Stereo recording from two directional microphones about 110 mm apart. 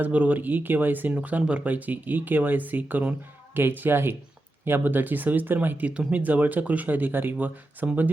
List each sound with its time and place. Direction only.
0.0 s speech: 15° right (ahead or behind)